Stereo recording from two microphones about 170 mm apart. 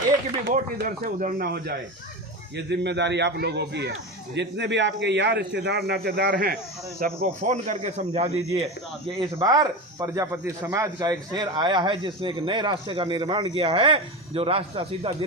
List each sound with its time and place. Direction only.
0.5 s speech: 50° right (ahead or behind)
2.6 s a man's voice: 90° right; by 6.6 s 65° right (ahead or behind)
7.2 s speech: 45° right (ahead or behind)
9.1 s a man's voice: 30° right (ahead or behind)